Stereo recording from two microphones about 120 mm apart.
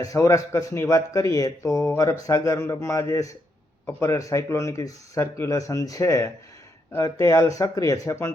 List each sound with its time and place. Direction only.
0.0 s speech: 25° left (ahead or behind)